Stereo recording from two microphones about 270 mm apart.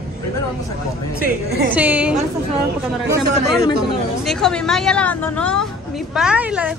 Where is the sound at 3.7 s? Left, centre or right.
Centre.